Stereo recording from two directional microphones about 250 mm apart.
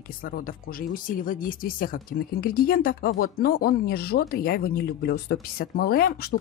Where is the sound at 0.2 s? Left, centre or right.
Left.